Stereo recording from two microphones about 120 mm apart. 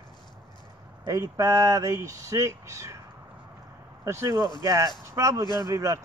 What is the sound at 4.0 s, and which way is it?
Speech, 25° right (ahead or behind).